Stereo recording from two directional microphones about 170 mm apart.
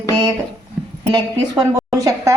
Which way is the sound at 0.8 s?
Centre (ahead or behind).